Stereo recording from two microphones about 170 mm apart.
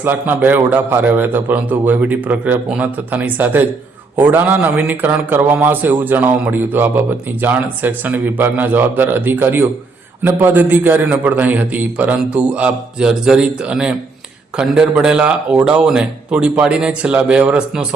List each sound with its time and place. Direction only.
0.0 s a man's voice: 10° right (ahead or behind)